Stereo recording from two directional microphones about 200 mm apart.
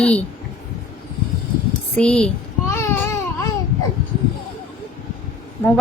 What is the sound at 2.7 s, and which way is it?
Babbling, 15° left (ahead or behind).